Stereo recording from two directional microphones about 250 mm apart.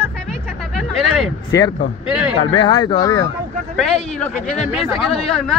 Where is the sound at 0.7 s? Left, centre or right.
Centre.